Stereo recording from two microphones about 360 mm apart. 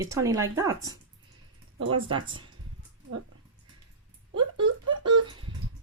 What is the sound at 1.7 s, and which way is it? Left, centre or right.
Speech, right.